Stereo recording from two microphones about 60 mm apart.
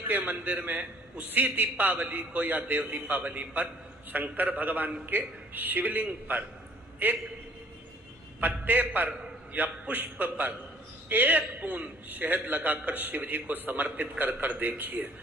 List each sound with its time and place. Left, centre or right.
0.2 s a man's voice: right
8.4 s a man's voice: right